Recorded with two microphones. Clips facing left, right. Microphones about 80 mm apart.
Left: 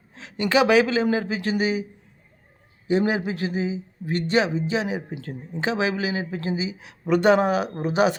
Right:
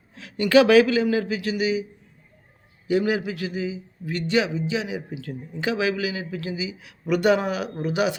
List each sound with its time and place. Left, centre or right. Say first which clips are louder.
0.1 s a woman's voice: right 4 dB; left
2.8 s speech: even; left